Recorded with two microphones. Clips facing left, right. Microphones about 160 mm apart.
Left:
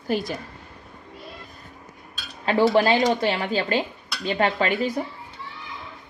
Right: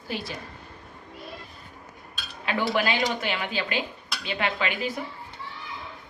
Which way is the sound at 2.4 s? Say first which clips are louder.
Left 7 dB; 35° left (ahead or behind).